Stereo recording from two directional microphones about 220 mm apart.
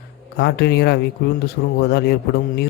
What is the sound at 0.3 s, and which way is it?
A man's voice, 50° left (ahead or behind).